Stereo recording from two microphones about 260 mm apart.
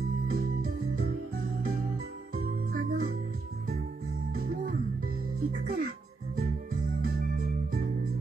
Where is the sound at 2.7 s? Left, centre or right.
Right.